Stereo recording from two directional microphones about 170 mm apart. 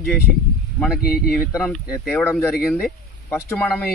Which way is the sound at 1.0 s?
60° left (ahead or behind).